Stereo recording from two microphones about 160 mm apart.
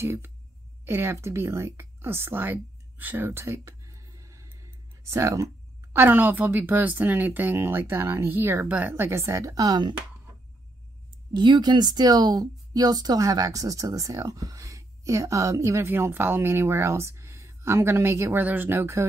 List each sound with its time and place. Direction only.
0.0 s a woman's voice: 15° right (ahead or behind)
11.3 s speech: 30° right (ahead or behind)